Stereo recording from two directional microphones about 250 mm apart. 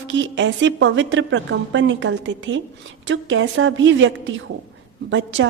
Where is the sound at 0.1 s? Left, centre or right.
Right.